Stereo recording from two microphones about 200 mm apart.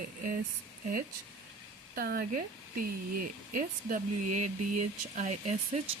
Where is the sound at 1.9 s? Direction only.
50° right (ahead or behind).